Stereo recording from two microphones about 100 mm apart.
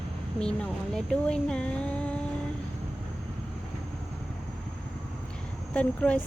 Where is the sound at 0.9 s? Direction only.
5° left (ahead or behind).